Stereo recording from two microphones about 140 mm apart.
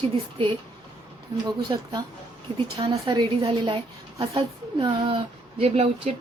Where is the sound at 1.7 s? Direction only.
35° right (ahead or behind).